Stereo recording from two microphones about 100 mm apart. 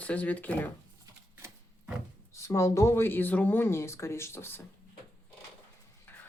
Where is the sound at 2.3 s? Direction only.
30° left (ahead or behind).